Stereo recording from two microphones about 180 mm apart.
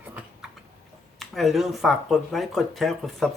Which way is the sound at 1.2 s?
Centre (ahead or behind).